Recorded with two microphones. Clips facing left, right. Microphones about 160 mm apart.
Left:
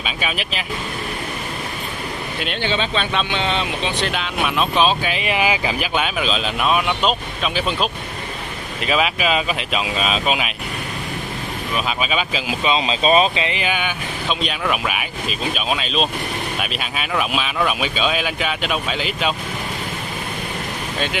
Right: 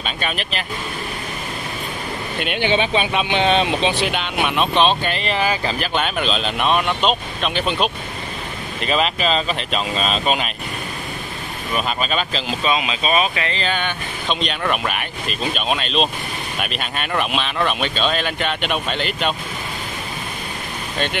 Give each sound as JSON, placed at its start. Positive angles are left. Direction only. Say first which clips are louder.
{"t": 0.0, "sound": "speech", "louder": "even", "side_deg": 5}
{"t": 2.6, "sound": "speech", "louder": "right 4 dB", "side_deg": -15}
{"t": 4.0, "sound": "speech", "louder": "right 1 dB", "side_deg": 0}
{"t": 11.7, "sound": "speech", "louder": "right 1 dB", "side_deg": 5}
{"t": 12.7, "sound": "speech", "louder": "left 6 dB", "side_deg": 30}
{"t": 13.4, "sound": "speech", "louder": "left 1 dB", "side_deg": 15}